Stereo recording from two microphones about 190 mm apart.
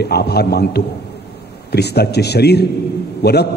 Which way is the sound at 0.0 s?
60° left (ahead or behind).